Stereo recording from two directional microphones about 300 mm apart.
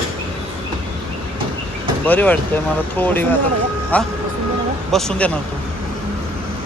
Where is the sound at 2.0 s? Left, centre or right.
Centre.